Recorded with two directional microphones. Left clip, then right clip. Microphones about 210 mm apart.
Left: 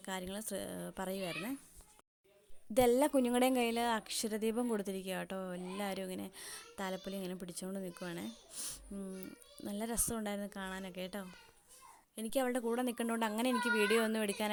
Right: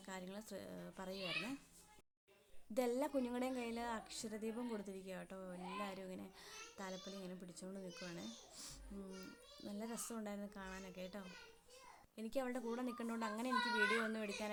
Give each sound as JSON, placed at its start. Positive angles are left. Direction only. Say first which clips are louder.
{"t": 0.0, "sound": "a woman's voice", "louder": "left 9 dB", "side_deg": 35}
{"t": 2.7, "sound": "a woman's voice", "louder": "left 10 dB", "side_deg": 35}